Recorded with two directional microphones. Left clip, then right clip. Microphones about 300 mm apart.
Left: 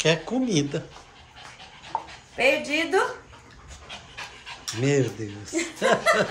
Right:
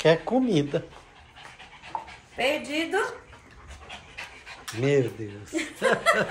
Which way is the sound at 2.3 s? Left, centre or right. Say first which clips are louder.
Left 4 dB; centre.